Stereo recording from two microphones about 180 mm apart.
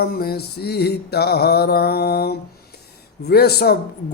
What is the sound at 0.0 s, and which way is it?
Speech, 55° left (ahead or behind).